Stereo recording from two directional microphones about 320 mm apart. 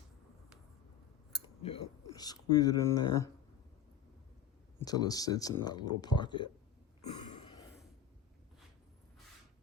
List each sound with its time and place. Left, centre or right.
1.6 s speech: centre
4.8 s speech: centre
7.0 s throat clearing: left